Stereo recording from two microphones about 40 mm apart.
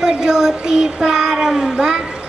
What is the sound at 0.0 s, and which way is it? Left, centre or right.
A woman's voice, centre.